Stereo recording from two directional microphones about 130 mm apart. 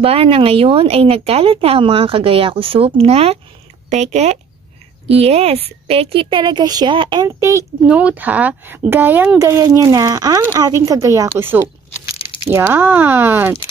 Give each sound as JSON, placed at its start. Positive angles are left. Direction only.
{"t": 0.0, "sound": "a woman's voice", "side_deg": -50}
{"t": 7.2, "sound": "speech", "side_deg": -25}
{"t": 7.8, "sound": "speech", "side_deg": -10}
{"t": 9.4, "sound": "speech", "side_deg": -25}